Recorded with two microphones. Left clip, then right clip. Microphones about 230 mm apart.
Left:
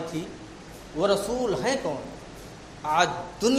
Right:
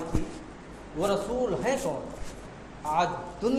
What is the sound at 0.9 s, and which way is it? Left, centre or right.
Speech, left.